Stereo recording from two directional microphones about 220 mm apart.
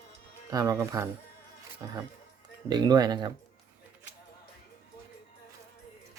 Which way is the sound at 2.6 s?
15° right (ahead or behind).